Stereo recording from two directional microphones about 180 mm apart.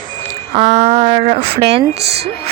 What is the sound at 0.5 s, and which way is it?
A woman's voice, 35° right (ahead or behind).